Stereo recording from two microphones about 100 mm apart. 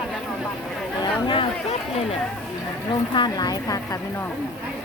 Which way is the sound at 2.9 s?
50° left (ahead or behind).